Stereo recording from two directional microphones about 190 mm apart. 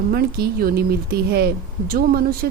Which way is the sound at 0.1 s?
55° right (ahead or behind).